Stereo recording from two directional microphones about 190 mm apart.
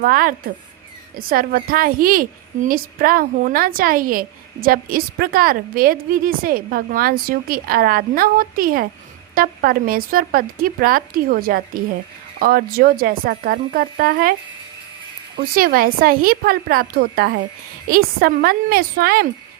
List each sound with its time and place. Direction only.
0.0 s a woman's voice: 50° right (ahead or behind)
15.5 s a woman's voice: 50° right (ahead or behind)